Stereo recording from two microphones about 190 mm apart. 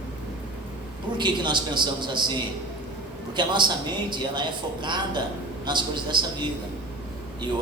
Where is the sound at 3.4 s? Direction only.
25° right (ahead or behind).